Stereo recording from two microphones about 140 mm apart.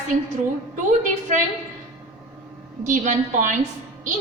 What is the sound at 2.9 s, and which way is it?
Speech, 65° right (ahead or behind).